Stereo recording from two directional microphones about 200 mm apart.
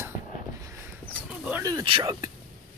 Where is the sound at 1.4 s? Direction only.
15° right (ahead or behind).